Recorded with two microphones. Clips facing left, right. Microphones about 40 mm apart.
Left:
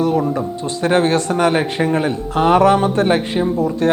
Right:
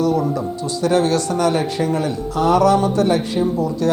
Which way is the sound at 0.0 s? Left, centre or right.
Left.